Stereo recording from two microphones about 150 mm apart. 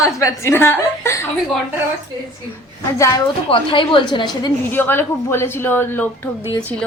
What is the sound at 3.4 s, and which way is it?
A woman's voice, 35° left (ahead or behind).